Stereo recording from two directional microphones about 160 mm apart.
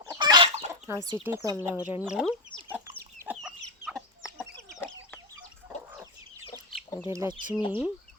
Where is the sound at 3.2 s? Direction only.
10° right (ahead or behind).